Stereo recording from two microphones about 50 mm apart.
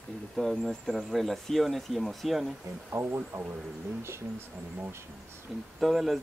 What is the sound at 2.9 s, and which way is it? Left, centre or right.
Speech, right.